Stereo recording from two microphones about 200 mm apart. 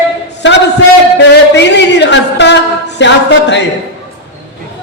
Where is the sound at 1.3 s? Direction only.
60° left (ahead or behind).